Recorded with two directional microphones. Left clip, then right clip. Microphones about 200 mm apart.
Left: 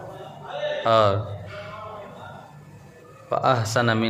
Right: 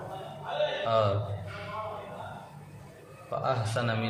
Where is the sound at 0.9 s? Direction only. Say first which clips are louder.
Left 10 dB; 50° left (ahead or behind).